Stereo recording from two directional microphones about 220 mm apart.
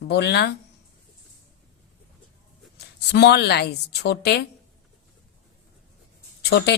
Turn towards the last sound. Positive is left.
turn(degrees=50)  # may be behind; listen again after turning